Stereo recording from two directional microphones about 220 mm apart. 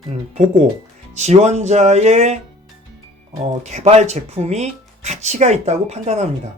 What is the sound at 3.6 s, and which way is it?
Speech, 30° right (ahead or behind).